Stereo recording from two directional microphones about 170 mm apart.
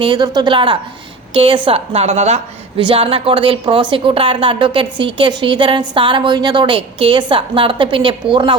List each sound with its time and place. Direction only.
0.0 s a woman's voice: 25° right (ahead or behind)